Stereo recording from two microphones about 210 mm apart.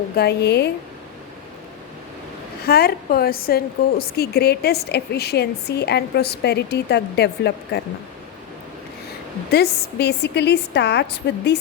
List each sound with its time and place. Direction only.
0.2 s a woman's voice: 50° left (ahead or behind)
2.6 s a woman's voice: 45° left (ahead or behind)
9.5 s a woman's voice: 50° left (ahead or behind)